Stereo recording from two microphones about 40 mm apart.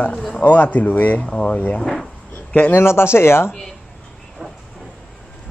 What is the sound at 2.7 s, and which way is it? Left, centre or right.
Speech, left.